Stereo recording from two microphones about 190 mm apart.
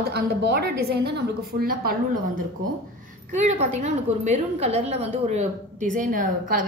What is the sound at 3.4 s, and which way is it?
A woman's voice, 40° right (ahead or behind).